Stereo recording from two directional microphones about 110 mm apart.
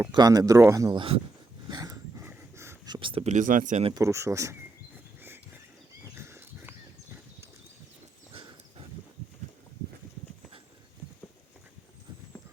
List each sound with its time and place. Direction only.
0.1 s speech: 35° right (ahead or behind)
0.9 s speech: 55° right (ahead or behind)
1.7 s dog: 35° right (ahead or behind)
2.2 s pant: 20° right (ahead or behind)
2.8 s speech: 45° right (ahead or behind)
3.2 s speech: 90° right
3.9 s speech: 25° right (ahead or behind)
6.1 s dog: 20° right (ahead or behind)
8.3 s dog: 50° right (ahead or behind)